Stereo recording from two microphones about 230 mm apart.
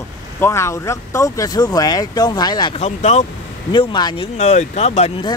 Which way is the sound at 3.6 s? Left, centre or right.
Centre.